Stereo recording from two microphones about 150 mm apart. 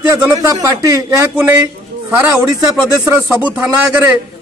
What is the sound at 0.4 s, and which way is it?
Speech, 25° right (ahead or behind).